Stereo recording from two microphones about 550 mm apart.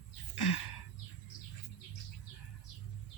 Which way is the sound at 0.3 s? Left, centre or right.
Left.